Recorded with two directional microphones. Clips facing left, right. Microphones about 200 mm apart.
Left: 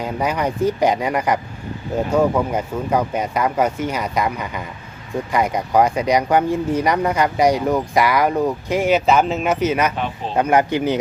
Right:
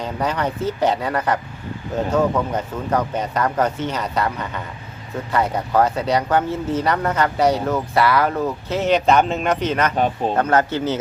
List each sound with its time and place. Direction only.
0.0 s speech: 10° left (ahead or behind)